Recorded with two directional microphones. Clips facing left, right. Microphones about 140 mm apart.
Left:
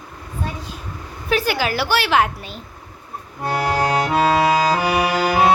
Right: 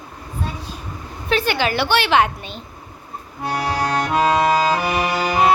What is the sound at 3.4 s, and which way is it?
Music, centre (ahead or behind).